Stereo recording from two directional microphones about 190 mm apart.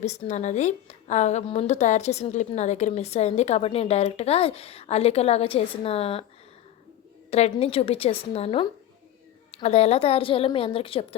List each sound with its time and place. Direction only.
0.0 s a woman's voice: 35° left (ahead or behind)
7.3 s a woman's voice: 35° left (ahead or behind)